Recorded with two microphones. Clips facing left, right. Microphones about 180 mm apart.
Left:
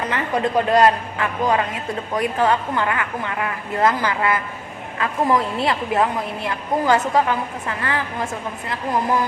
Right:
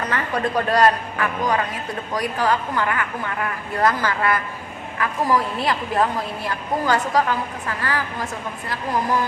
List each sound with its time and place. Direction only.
0.0 s a man's voice: 20° left (ahead or behind)